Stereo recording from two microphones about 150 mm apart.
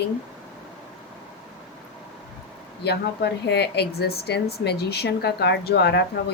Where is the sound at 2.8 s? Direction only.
90° left.